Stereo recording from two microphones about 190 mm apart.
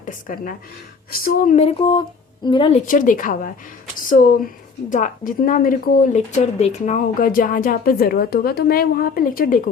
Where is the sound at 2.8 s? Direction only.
45° left (ahead or behind).